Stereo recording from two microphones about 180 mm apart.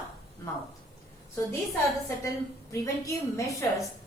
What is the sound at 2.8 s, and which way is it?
A woman's voice, 20° left (ahead or behind).